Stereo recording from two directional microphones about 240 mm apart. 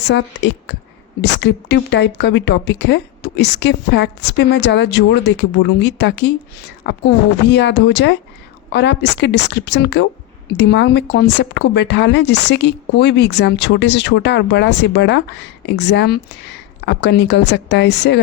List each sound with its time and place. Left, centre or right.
0.1 s speech: left